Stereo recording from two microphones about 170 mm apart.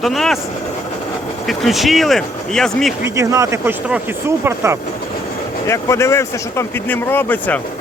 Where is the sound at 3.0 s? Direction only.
15° right (ahead or behind).